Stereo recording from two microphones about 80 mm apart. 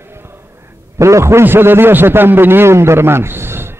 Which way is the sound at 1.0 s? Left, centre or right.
Right.